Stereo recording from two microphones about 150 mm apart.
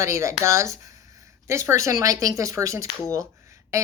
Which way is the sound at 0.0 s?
20° right (ahead or behind).